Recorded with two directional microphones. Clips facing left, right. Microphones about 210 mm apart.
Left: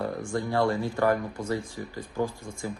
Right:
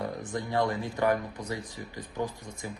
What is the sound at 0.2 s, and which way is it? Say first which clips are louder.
Speech: left 3 dB; 20° right (ahead or behind).